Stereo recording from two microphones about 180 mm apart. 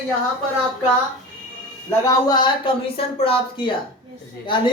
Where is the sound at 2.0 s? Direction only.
20° left (ahead or behind).